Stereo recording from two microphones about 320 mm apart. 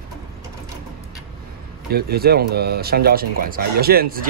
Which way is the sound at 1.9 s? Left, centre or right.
Right.